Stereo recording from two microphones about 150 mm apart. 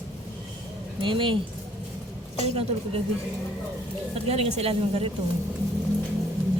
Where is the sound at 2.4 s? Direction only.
45° right (ahead or behind).